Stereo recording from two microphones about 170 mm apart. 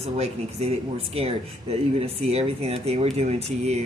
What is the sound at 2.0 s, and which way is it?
Speech, 35° right (ahead or behind).